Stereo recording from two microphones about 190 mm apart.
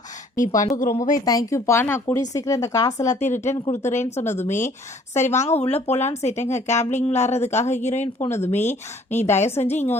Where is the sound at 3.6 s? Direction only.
35° left (ahead or behind).